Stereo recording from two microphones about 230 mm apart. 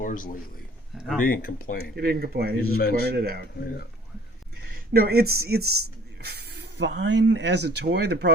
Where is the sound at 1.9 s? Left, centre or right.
Right.